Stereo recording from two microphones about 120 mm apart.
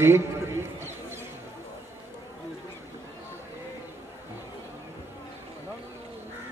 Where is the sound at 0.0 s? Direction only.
20° right (ahead or behind).